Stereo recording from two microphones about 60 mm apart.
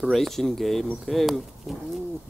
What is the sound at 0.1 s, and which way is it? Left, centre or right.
Speech, centre.